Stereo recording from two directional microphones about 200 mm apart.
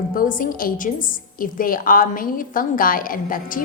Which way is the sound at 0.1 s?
45° left (ahead or behind).